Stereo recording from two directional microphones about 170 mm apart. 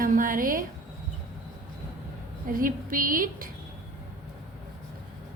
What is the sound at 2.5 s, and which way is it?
Speech, 55° right (ahead or behind).